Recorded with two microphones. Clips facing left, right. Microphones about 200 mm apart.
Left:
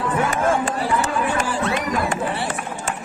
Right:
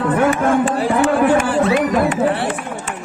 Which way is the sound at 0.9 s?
55° right (ahead or behind).